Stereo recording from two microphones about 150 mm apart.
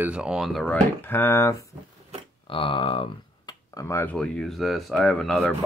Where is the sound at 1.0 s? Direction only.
15° left (ahead or behind).